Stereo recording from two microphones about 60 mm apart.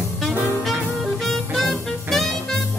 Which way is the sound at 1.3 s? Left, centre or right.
Centre.